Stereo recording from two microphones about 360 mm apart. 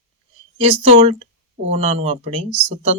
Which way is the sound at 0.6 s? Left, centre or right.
Centre.